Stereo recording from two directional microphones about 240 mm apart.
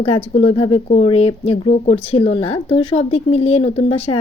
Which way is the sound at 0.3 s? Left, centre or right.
Left.